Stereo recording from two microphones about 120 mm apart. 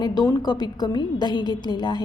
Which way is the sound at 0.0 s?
35° left (ahead or behind).